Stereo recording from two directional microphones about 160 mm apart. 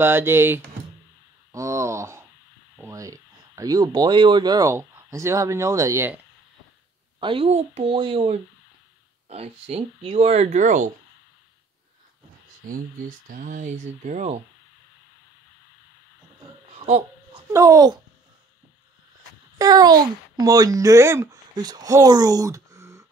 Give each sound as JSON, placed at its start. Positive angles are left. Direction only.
{"t": 0.0, "sound": "speech", "side_deg": -15}
{"t": 1.5, "sound": "a sound", "side_deg": -20}
{"t": 2.7, "sound": "speech", "side_deg": -20}
{"t": 7.2, "sound": "speech", "side_deg": -35}
{"t": 12.6, "sound": "speech", "side_deg": -55}
{"t": 16.7, "sound": "babbling", "side_deg": -40}
{"t": 17.5, "sound": "a child's voice", "side_deg": -20}
{"t": 19.6, "sound": "speech", "side_deg": -25}